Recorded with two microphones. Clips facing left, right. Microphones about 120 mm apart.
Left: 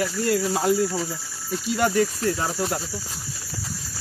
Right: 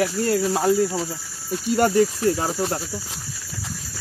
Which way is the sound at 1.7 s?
40° right (ahead or behind).